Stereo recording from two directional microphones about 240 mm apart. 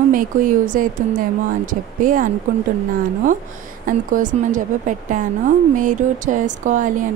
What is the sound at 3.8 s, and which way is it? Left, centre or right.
A woman's voice, right.